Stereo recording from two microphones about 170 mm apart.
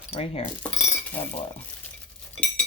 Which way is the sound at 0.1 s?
35° left (ahead or behind).